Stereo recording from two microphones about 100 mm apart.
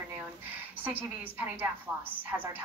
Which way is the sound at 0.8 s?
20° right (ahead or behind).